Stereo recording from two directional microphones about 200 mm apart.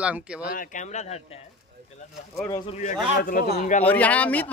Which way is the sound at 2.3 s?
10° left (ahead or behind).